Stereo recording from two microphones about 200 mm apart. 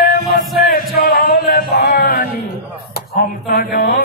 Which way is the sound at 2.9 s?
50° left (ahead or behind).